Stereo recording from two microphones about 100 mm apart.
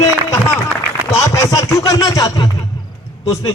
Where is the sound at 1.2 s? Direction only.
30° left (ahead or behind).